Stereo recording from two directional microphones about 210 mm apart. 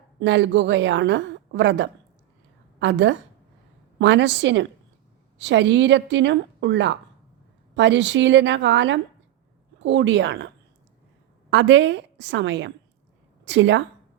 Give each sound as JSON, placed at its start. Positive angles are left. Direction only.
{"t": 0.2, "sound": "a woman's voice", "side_deg": -60}
{"t": 11.5, "sound": "a woman's voice", "side_deg": -60}